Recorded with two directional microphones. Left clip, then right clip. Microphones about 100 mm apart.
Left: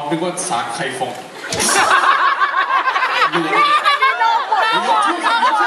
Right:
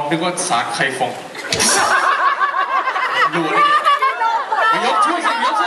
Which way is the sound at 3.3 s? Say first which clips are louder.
Even; 20° left (ahead or behind).